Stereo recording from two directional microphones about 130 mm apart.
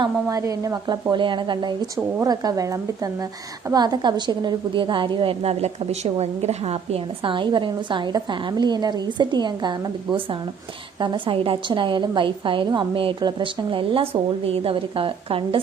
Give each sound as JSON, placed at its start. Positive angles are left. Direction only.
{"t": 0.0, "sound": "a woman's voice", "side_deg": -25}
{"t": 1.1, "sound": "a woman's voice", "side_deg": -40}
{"t": 11.0, "sound": "a woman's voice", "side_deg": -40}